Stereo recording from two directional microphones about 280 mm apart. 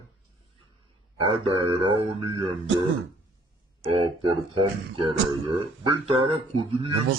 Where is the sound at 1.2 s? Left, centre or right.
Centre.